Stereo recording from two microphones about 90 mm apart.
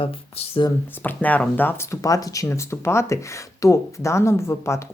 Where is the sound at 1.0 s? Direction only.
20° left (ahead or behind).